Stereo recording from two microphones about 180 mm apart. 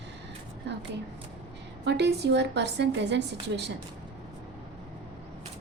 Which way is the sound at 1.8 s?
70° right (ahead or behind).